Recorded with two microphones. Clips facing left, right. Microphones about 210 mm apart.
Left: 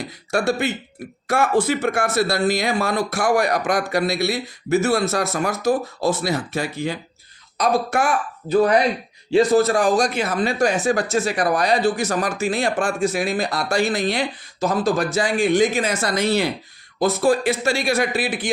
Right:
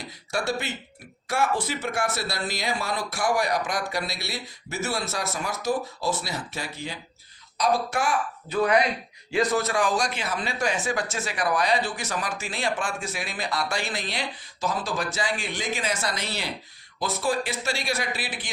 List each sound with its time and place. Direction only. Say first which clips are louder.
0.3 s speech: left 7 dB; 50° left (ahead or behind)
8.4 s speech: left 6 dB; 35° left (ahead or behind); by 18.5 s 50° left (ahead or behind)